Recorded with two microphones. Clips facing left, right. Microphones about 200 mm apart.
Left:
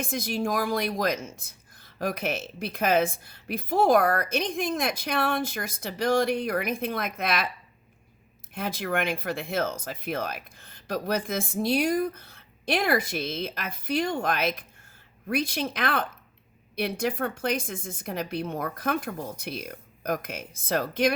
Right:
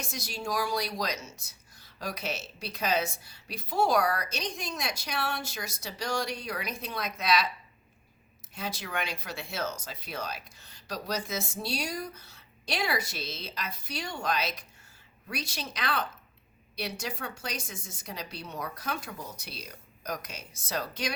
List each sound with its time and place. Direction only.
0.0 s speech: 55° left (ahead or behind)
8.5 s speech: 55° left (ahead or behind)